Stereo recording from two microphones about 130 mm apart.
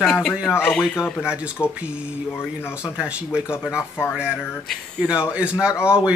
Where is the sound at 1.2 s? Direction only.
10° right (ahead or behind).